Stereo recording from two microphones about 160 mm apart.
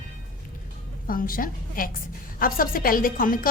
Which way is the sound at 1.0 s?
60° left (ahead or behind).